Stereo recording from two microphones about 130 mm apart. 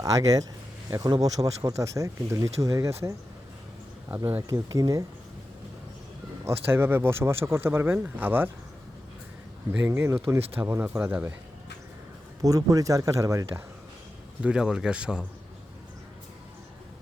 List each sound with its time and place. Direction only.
0.0 s speech: 25° right (ahead or behind)
4.2 s speech: 20° right (ahead or behind)
6.7 s speech: 20° right (ahead or behind)
9.7 s speech: 15° right (ahead or behind)
12.4 s speech: 30° right (ahead or behind)
14.4 s speech: 5° right (ahead or behind)